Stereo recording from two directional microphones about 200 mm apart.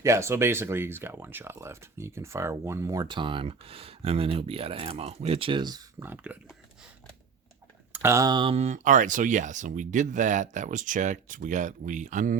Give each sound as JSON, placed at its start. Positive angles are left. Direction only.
{"t": 0.0, "sound": "speech", "side_deg": -15}
{"t": 7.9, "sound": "speech", "side_deg": -15}